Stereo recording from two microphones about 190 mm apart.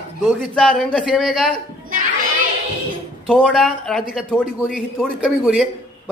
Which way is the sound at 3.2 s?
5° left (ahead or behind).